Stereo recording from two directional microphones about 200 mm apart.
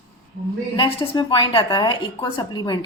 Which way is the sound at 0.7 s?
25° left (ahead or behind).